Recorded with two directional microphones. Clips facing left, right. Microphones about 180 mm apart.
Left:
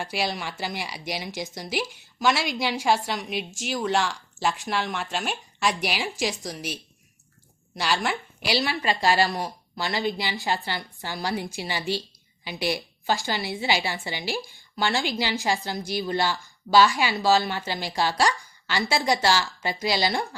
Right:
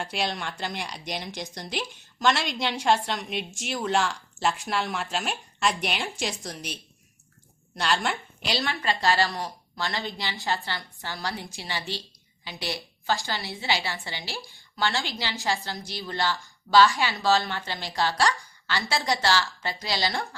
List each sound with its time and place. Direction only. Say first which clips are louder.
0.0 s speech: left 1 dB; 5° left (ahead or behind)
7.8 s a woman's voice: left 1 dB; 5° left (ahead or behind)
16.7 s speech: left 1 dB; 30° left (ahead or behind)
17.0 s a woman's voice: left 2 dB; 10° left (ahead or behind)